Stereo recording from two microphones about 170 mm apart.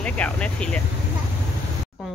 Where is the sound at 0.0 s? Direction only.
5° left (ahead or behind).